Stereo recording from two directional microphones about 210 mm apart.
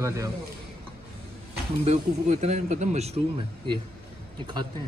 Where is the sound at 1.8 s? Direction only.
35° right (ahead or behind).